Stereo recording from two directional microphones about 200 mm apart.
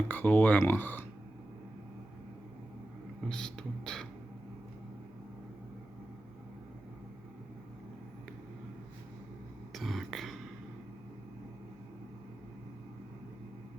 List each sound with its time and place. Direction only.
0.1 s speech: 10° left (ahead or behind)
3.2 s beatboxing: 5° left (ahead or behind)
9.7 s throat clearing: centre (ahead or behind)